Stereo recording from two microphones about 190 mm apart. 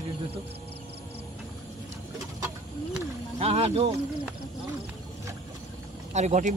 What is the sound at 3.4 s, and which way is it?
Speech, 30° right (ahead or behind).